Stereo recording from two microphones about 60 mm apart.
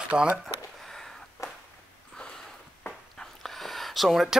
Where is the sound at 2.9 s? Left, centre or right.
Centre.